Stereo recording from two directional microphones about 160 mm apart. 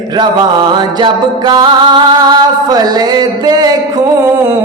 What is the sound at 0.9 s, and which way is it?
Music, 25° right (ahead or behind).